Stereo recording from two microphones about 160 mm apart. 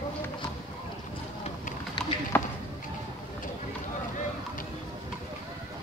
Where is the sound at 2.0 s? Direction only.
25° left (ahead or behind).